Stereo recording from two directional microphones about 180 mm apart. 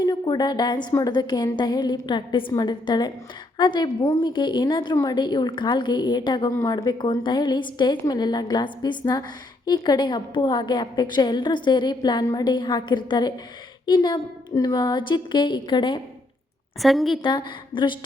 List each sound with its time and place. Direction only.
0.0 s a woman's voice: 20° left (ahead or behind)
16.8 s a woman's voice: centre (ahead or behind)
17.2 s a woman's voice: 25° left (ahead or behind)